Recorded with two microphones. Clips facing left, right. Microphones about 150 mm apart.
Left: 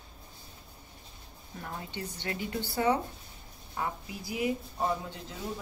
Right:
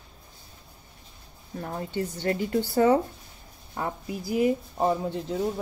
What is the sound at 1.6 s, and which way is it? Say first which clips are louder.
Speech: right 9 dB; 40° right (ahead or behind).